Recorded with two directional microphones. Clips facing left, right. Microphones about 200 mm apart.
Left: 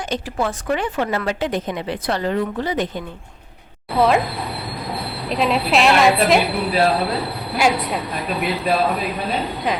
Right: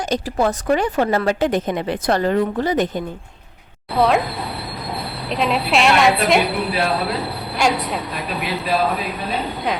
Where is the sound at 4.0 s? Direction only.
Centre (ahead or behind).